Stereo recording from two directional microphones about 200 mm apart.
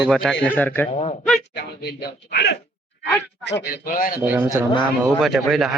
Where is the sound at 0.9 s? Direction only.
30° left (ahead or behind).